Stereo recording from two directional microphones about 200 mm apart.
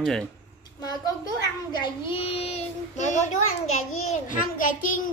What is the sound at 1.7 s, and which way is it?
Child singing, 25° left (ahead or behind).